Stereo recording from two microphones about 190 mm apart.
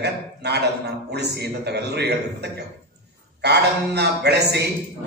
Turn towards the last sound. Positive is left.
turn(degrees=-60)  # may be behind; listen again after turning